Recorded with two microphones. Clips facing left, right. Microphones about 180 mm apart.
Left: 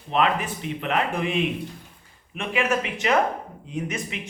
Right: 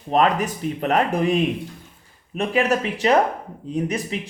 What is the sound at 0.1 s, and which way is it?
Speech, 40° right (ahead or behind).